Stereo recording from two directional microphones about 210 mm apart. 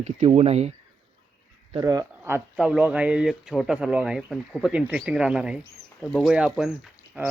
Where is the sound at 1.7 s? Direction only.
15° right (ahead or behind).